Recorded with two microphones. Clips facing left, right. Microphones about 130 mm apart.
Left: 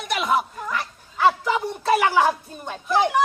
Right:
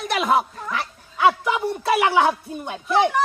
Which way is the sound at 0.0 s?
40° right (ahead or behind).